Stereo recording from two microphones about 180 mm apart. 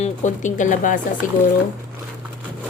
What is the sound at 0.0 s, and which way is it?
Speech, 40° left (ahead or behind).